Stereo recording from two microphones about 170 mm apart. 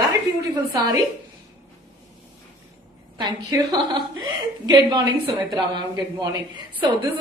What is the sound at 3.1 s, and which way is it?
Speech, 25° right (ahead or behind).